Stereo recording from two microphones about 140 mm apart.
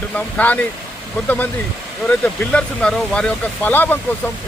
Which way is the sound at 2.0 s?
10° left (ahead or behind).